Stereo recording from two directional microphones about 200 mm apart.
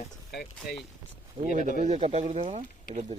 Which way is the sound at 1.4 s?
25° right (ahead or behind).